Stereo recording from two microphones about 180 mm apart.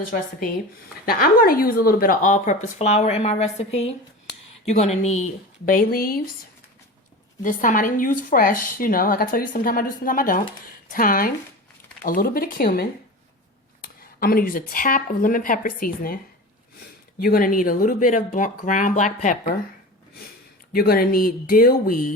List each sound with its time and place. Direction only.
1.0 s a woman's voice: 55° left (ahead or behind)
7.4 s a woman's voice: 45° left (ahead or behind)
17.2 s a woman's voice: 50° left (ahead or behind)
20.7 s speech: 55° left (ahead or behind)